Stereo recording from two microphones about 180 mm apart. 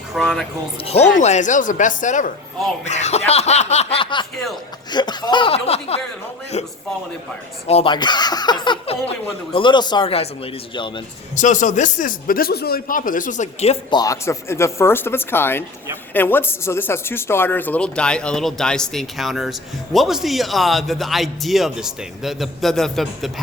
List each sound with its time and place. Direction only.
0.1 s speech: centre (ahead or behind)
1.1 s a man's voice: 40° left (ahead or behind)
2.8 s laughter: 40° left (ahead or behind)
4.9 s speech: 25° left (ahead or behind)
5.6 s laughter: 35° left (ahead or behind)
7.7 s speech: 30° left (ahead or behind)
11.3 s a man's voice: 45° left (ahead or behind)
13.9 s speech: 20° left (ahead or behind); by 23.3 s centre (ahead or behind)